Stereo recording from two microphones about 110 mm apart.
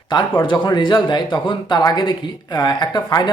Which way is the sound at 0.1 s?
40° left (ahead or behind).